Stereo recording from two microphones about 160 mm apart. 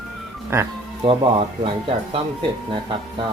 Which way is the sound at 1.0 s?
35° right (ahead or behind).